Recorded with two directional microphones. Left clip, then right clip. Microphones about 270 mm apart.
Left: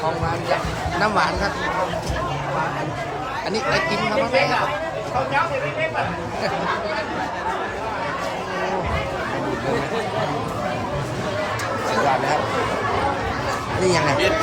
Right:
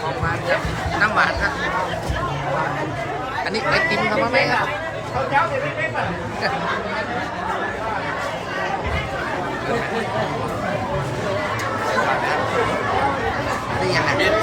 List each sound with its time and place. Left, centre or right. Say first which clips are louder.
3.5 s speech: right 2 dB; centre
13.8 s speech: left 1 dB; left